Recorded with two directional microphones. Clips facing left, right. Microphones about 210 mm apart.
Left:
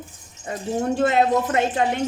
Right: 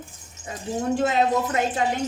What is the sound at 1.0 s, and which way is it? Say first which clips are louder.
Speech: left 4 dB; 60° left (ahead or behind).